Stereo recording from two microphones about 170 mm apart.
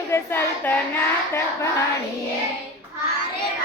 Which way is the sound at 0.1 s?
10° left (ahead or behind).